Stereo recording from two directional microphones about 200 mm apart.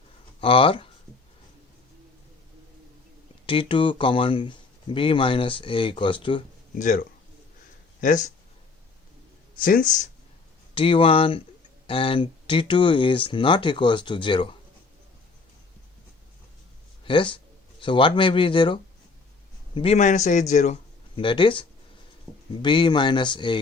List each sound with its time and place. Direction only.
0.3 s speech: 25° left (ahead or behind)
3.4 s speech: 25° left (ahead or behind)
6.7 s a man's voice: 40° left (ahead or behind)
8.0 s a man's voice: 40° left (ahead or behind)
9.6 s a man's voice: 45° left (ahead or behind)
10.8 s speech: 25° left (ahead or behind)
17.1 s a man's voice: 25° left (ahead or behind)
21.2 s speech: 25° left (ahead or behind)